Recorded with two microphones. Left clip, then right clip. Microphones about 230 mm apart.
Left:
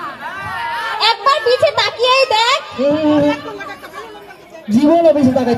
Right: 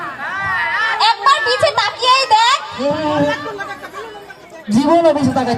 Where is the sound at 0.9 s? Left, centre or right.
Right.